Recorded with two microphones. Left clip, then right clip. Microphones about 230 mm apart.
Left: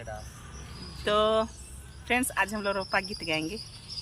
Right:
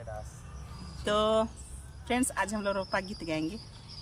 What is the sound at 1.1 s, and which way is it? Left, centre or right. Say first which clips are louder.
Speech: left 2 dB; centre.